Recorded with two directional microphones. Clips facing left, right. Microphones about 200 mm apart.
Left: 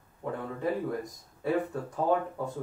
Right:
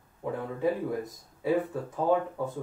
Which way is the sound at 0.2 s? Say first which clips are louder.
Right 3 dB; 10° right (ahead or behind).